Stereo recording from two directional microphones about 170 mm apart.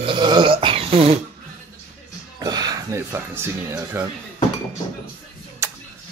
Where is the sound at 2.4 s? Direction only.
25° right (ahead or behind).